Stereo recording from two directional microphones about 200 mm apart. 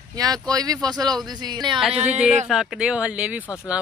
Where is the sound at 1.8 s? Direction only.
5° right (ahead or behind).